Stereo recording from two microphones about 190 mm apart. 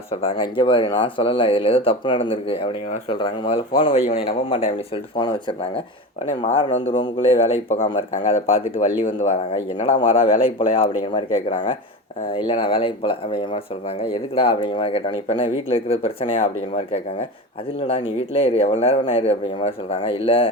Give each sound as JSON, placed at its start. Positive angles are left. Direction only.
{"t": 0.1, "sound": "speech", "side_deg": 30}
{"t": 6.5, "sound": "speech", "side_deg": 35}